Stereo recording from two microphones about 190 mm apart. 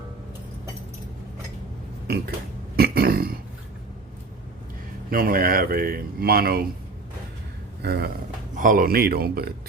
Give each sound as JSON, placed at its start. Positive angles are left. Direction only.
{"t": 2.0, "sound": "burping", "side_deg": -55}
{"t": 5.1, "sound": "speech", "side_deg": -50}
{"t": 7.8, "sound": "speech", "side_deg": -60}
{"t": 8.5, "sound": "speech", "side_deg": -45}